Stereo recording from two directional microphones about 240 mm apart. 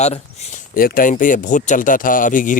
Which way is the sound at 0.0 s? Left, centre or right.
Left.